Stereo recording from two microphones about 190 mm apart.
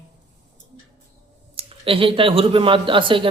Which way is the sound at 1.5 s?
30° right (ahead or behind).